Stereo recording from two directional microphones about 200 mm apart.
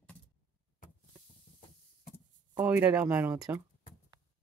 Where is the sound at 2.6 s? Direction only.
5° right (ahead or behind).